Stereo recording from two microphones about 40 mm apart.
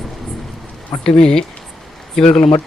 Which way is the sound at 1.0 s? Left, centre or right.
Centre.